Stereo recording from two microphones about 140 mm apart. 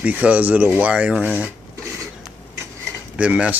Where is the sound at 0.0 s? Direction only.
10° right (ahead or behind).